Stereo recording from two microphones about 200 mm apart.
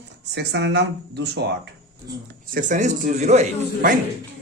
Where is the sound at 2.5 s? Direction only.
40° right (ahead or behind).